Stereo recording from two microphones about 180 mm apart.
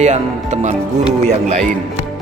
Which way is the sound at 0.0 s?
40° right (ahead or behind).